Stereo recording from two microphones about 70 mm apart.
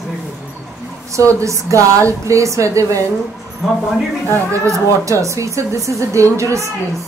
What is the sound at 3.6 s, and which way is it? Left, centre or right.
Speech, centre.